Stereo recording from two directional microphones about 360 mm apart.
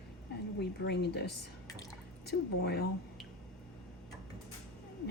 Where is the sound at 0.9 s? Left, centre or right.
Left.